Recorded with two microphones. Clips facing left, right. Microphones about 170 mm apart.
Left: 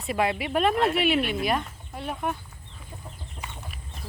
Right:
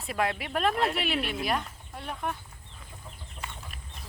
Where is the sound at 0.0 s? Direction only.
5° left (ahead or behind).